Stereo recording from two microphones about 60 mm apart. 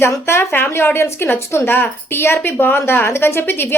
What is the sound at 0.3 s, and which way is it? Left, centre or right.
A woman's voice, left.